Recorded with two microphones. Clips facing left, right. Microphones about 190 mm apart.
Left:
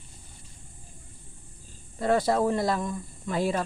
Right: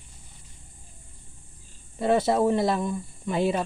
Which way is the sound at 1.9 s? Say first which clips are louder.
Right 2 dB; 25° right (ahead or behind).